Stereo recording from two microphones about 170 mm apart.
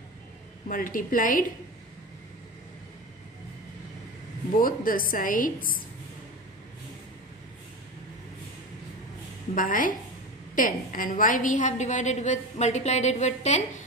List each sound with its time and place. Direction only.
0.7 s a woman's voice: 55° left (ahead or behind)
4.6 s a woman's voice: 55° left (ahead or behind)
9.6 s a woman's voice: 55° left (ahead or behind)